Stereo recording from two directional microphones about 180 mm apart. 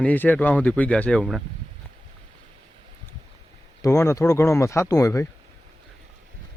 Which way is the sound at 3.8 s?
15° left (ahead or behind).